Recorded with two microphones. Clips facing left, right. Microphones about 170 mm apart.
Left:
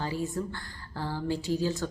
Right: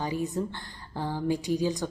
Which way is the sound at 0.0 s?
15° right (ahead or behind).